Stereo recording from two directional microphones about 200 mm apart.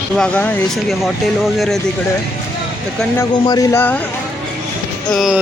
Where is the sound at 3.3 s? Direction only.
20° left (ahead or behind).